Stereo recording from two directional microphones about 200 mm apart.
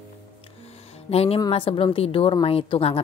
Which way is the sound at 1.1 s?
30° left (ahead or behind).